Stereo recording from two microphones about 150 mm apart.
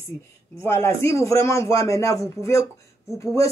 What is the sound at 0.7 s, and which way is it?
Speech, 15° left (ahead or behind).